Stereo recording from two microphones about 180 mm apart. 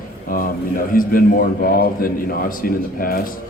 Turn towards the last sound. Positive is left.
turn(degrees=50)  # may be behind; listen again after turning